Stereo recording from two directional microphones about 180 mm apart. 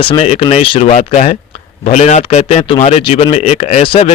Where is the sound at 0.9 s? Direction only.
40° left (ahead or behind).